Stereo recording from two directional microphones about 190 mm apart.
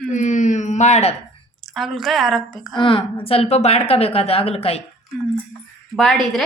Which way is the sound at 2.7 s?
25° left (ahead or behind).